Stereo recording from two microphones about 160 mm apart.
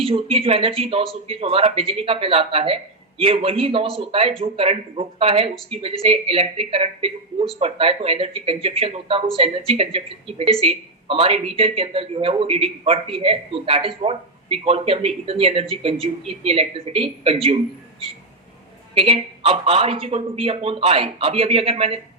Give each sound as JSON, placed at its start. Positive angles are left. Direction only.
{"t": 0.0, "sound": "a woman's voice", "side_deg": -35}
{"t": 18.9, "sound": "a woman's voice", "side_deg": -35}